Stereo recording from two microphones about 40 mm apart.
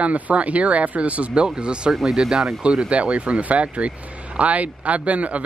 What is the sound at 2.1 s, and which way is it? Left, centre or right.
Speech, centre.